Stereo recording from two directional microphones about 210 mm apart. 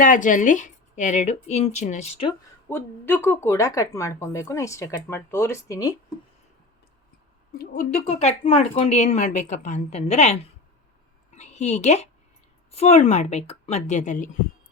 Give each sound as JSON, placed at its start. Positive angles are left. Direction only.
{"t": 0.0, "sound": "a woman's voice", "side_deg": 40}
{"t": 2.6, "sound": "speech", "side_deg": 10}
{"t": 7.6, "sound": "a woman's voice", "side_deg": 40}